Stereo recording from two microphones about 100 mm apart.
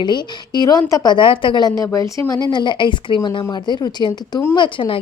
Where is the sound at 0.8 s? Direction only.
35° left (ahead or behind).